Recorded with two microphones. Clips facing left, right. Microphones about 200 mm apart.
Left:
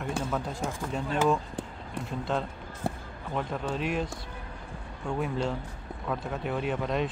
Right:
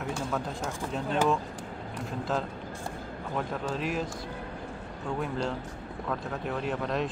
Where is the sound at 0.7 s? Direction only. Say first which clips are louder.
Even; centre (ahead or behind).